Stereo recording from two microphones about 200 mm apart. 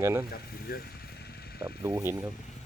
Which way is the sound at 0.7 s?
50° left (ahead or behind).